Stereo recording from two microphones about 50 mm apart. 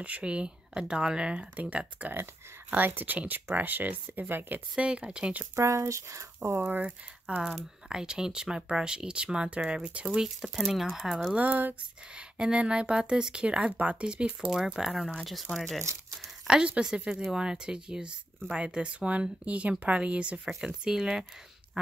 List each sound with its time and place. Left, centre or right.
0.0 s speech: right
2.8 s speech: right
4.7 s speech: right
5.6 s speech: right
6.7 s speech: right
7.4 s speech: centre
11.3 s speech: right
12.4 s speech: centre
14.8 s speech: centre
16.4 s speech: centre
20.6 s speech: centre